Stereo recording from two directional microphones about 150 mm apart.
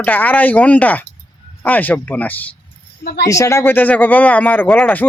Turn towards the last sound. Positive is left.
turn(degrees=10)  # may be behind; listen again after turning